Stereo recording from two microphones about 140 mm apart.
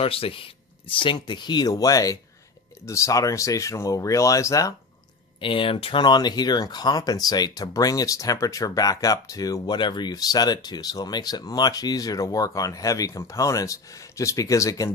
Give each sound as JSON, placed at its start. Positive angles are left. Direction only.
{"t": 0.0, "sound": "speech", "side_deg": 40}
{"t": 5.4, "sound": "speech", "side_deg": 40}